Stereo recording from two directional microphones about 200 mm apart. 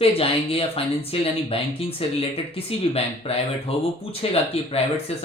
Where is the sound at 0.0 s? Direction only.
30° left (ahead or behind).